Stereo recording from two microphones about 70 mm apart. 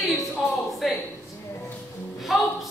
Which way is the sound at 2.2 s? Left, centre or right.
Centre.